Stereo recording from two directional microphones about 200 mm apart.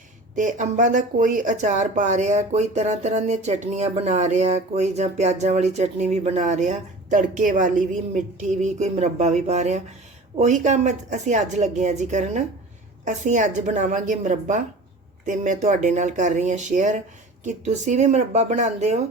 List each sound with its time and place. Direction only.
0.3 s speech: 40° right (ahead or behind)